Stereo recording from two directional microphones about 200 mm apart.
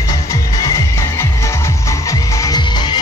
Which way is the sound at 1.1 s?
15° left (ahead or behind).